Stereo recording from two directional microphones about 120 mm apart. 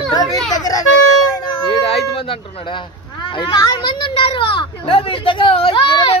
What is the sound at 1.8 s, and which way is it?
Speech, 55° left (ahead or behind).